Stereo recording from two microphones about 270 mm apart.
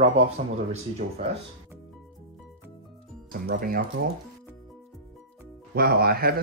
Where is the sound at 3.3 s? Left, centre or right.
Right.